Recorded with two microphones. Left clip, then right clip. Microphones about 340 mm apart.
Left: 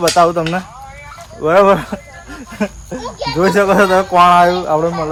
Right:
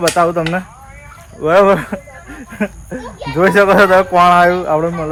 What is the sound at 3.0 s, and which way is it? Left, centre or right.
Speech, left.